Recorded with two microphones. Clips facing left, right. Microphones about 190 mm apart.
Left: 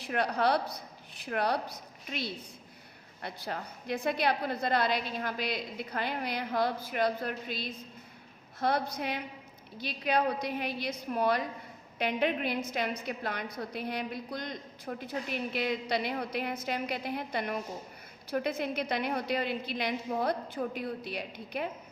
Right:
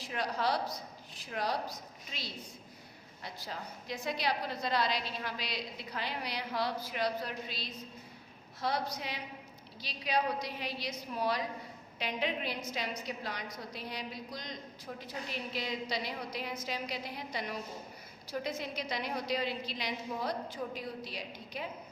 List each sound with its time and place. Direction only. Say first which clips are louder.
0.0 s a woman's voice: left 5 dB; 60° left (ahead or behind)